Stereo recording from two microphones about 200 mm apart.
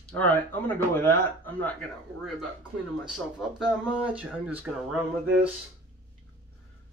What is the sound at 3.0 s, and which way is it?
Speech, 5° right (ahead or behind).